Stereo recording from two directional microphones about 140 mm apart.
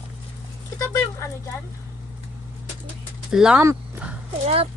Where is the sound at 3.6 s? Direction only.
20° right (ahead or behind).